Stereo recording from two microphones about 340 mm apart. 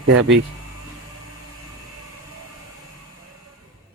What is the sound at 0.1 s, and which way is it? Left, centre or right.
Speech, right.